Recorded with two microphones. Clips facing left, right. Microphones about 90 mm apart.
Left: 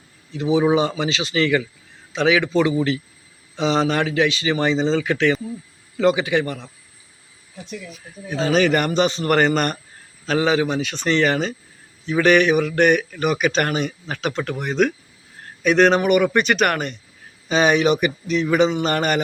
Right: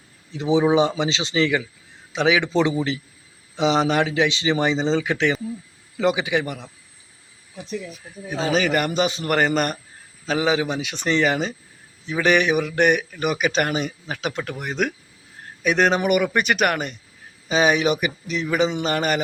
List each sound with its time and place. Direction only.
0.3 s a man's voice: 25° right (ahead or behind)
8.3 s a man's voice: 5° right (ahead or behind)